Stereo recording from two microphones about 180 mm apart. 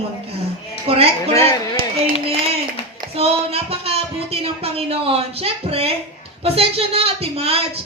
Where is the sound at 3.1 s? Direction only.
35° right (ahead or behind).